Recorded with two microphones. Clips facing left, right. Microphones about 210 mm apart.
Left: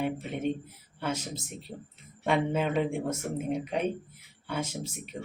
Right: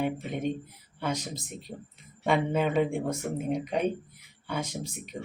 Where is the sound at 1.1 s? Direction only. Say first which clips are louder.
Right 1 dB; 35° right (ahead or behind).